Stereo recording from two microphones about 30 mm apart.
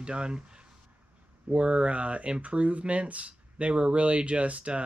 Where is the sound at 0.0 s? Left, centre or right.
Right.